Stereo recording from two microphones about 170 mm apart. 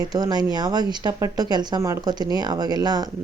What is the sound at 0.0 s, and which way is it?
Speech, 20° right (ahead or behind).